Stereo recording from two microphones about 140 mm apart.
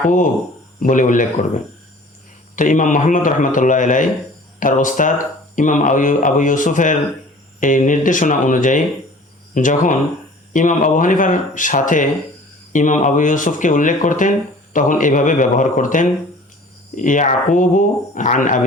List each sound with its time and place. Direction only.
0.8 s speech: 65° left (ahead or behind)